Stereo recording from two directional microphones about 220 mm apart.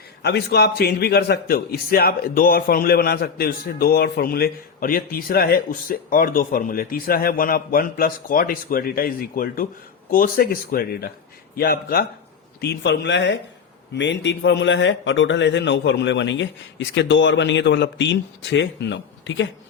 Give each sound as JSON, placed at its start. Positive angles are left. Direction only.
{"t": 0.2, "sound": "a man's voice", "side_deg": 50}